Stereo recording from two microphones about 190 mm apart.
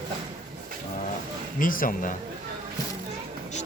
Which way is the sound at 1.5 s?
45° left (ahead or behind).